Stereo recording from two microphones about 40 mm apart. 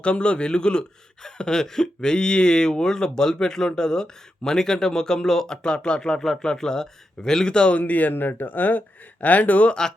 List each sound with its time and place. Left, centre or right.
0.0 s speech: left
7.8 s speech: left
8.1 s speech: left
9.6 s speech: centre